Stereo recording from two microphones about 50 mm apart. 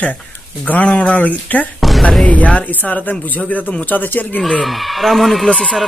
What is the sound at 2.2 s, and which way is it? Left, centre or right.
Speech, left.